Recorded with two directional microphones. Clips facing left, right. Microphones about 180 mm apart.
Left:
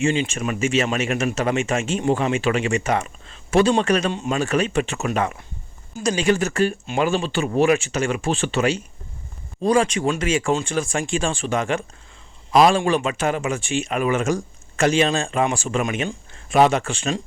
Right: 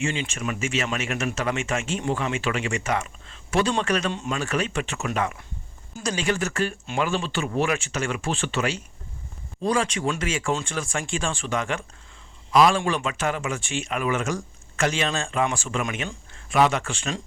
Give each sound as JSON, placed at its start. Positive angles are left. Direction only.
{"t": 0.0, "sound": "speech", "side_deg": 20}
{"t": 6.0, "sound": "speech", "side_deg": 15}
{"t": 13.0, "sound": "speech", "side_deg": 20}